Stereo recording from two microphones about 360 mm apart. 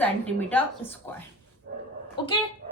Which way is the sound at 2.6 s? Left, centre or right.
Right.